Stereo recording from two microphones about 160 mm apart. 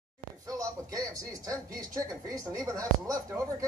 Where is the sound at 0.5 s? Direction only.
20° right (ahead or behind).